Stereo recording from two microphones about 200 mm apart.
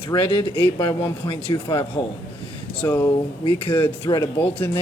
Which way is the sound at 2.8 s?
10° left (ahead or behind).